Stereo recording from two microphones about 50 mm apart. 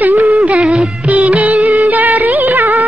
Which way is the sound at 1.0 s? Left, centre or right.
Right.